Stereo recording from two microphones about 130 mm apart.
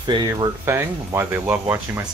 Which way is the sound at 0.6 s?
20° right (ahead or behind).